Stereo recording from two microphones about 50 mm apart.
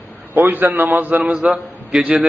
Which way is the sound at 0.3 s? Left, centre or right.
Right.